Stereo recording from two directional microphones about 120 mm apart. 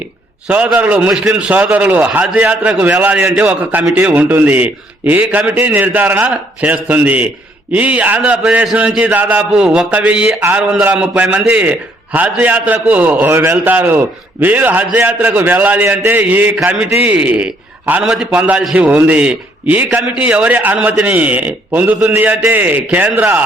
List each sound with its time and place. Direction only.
0.4 s a man's voice: 10° right (ahead or behind)